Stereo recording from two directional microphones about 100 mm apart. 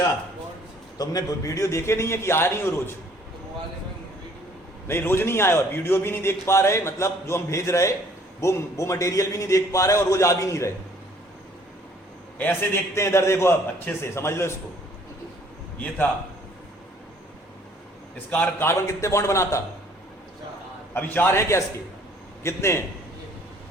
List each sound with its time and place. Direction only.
0.9 s a man's voice: 40° left (ahead or behind)
4.9 s a man's voice: 25° left (ahead or behind)
12.4 s a man's voice: 20° left (ahead or behind)
18.3 s a man's voice: 15° left (ahead or behind)
18.7 s a man's voice: 30° left (ahead or behind)
20.9 s a man's voice: 20° left (ahead or behind)